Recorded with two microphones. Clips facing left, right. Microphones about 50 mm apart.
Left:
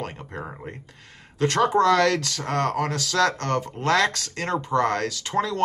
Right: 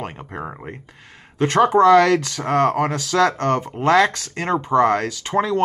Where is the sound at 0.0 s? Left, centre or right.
Centre.